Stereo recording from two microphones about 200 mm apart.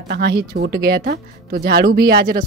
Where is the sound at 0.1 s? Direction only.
50° right (ahead or behind).